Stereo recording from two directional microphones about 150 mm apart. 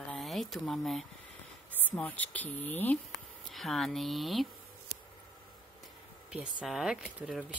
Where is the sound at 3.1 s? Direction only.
Centre (ahead or behind).